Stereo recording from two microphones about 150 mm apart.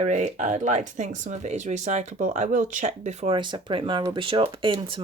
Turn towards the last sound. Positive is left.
turn(degrees=-35)  # may be behind; listen again after turning